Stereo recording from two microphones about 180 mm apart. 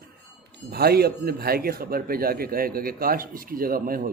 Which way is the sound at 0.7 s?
60° right (ahead or behind).